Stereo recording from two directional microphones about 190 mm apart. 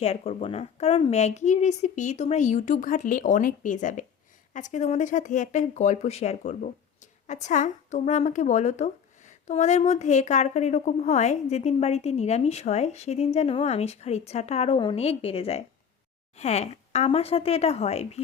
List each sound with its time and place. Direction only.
0.0 s speech: 30° left (ahead or behind)